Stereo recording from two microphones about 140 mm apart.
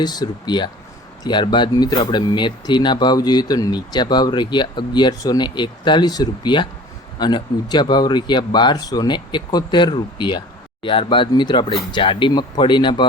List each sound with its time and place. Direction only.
0.0 s speech: 30° left (ahead or behind)